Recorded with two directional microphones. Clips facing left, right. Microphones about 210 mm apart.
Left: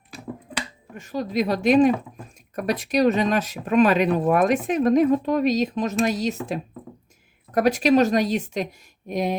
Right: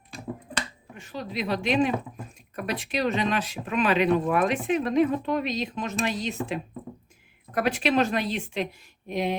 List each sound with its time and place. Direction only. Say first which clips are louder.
0.9 s speech: left 8 dB; 40° left (ahead or behind)
7.5 s a woman's voice: left 6 dB; 40° left (ahead or behind)